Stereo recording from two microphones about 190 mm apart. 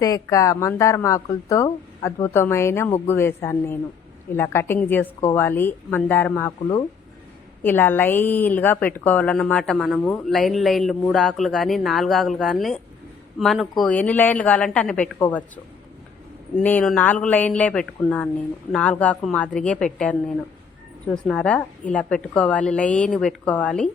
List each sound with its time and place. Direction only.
0.0 s a woman's voice: 15° left (ahead or behind)
7.6 s a woman's voice: 10° left (ahead or behind)
16.6 s a woman's voice: 5° left (ahead or behind)